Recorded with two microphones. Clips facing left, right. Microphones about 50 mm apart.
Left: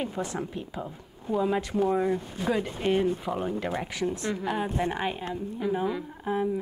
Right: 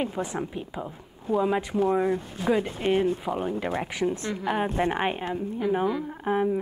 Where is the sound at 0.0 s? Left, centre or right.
Centre.